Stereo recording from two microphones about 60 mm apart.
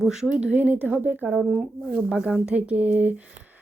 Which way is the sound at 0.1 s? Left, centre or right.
Centre.